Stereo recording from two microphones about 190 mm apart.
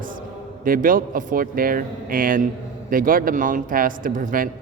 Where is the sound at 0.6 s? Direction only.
45° right (ahead or behind).